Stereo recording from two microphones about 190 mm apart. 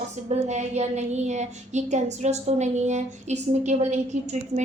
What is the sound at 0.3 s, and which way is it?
A woman's voice, 35° right (ahead or behind).